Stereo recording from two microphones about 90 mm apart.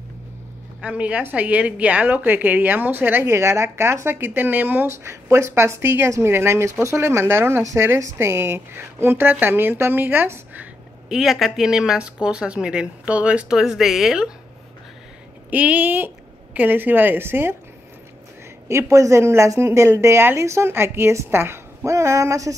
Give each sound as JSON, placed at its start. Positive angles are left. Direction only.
{"t": 0.7, "sound": "a woman's voice", "side_deg": -15}
{"t": 11.1, "sound": "speech", "side_deg": -5}
{"t": 15.5, "sound": "a woman's voice", "side_deg": -15}
{"t": 18.7, "sound": "speech", "side_deg": -35}